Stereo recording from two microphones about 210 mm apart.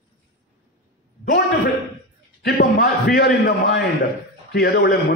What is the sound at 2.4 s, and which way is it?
A man's voice, 50° left (ahead or behind).